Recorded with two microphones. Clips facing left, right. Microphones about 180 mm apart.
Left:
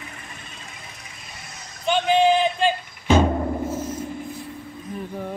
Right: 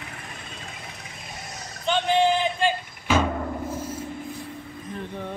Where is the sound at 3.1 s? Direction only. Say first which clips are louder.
Left 5 dB; 30° left (ahead or behind).